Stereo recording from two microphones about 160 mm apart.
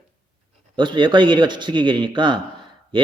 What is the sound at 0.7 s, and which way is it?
Speech, 30° right (ahead or behind).